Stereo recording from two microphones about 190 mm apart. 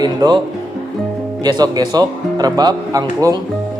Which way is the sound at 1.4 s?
20° right (ahead or behind).